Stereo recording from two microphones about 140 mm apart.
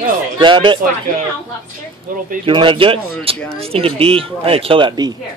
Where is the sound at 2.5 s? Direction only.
35° right (ahead or behind).